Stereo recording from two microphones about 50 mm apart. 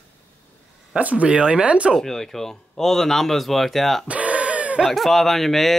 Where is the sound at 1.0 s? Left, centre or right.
Right.